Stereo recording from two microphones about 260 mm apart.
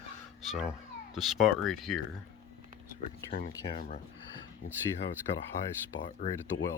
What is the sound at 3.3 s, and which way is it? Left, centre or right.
Speech, left.